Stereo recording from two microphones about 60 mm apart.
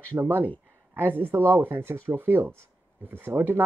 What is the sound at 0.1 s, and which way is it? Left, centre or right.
Speech, right.